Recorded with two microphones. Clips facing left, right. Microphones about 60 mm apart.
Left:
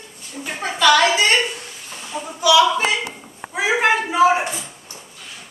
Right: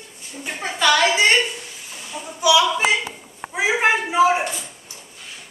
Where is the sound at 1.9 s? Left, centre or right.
Centre.